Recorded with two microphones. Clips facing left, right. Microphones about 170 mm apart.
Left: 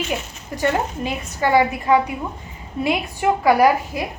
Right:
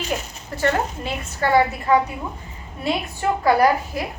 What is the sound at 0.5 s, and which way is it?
A woman's voice, 15° left (ahead or behind).